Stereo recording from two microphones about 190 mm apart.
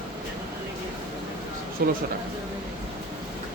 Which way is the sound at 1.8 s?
55° right (ahead or behind).